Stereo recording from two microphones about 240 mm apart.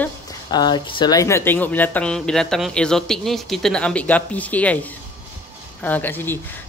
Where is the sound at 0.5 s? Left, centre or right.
Centre.